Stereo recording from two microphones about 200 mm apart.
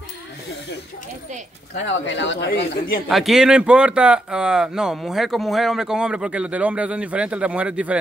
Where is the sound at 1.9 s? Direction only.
65° left (ahead or behind).